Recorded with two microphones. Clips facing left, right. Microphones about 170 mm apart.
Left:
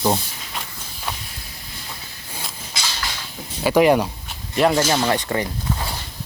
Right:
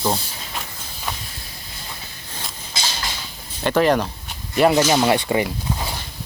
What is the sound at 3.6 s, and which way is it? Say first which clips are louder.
Speech: left 2 dB; 10° left (ahead or behind).